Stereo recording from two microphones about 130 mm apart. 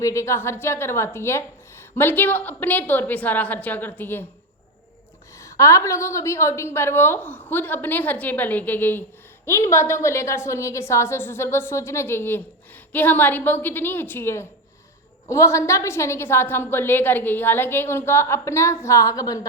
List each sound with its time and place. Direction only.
0.0 s a woman's voice: 25° left (ahead or behind)
5.4 s a woman's voice: 25° left (ahead or behind)